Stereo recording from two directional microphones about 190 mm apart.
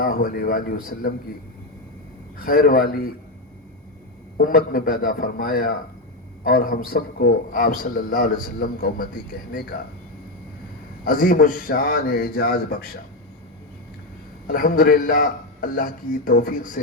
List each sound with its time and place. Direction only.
0.0 s a man's voice: 50° left (ahead or behind)
2.4 s a man's voice: 50° left (ahead or behind)
4.4 s a man's voice: 50° left (ahead or behind)
11.0 s a man's voice: 45° left (ahead or behind)
14.4 s a man's voice: 45° left (ahead or behind)